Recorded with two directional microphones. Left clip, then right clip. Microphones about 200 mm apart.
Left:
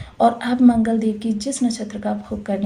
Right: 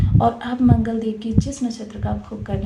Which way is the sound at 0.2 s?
45° left (ahead or behind).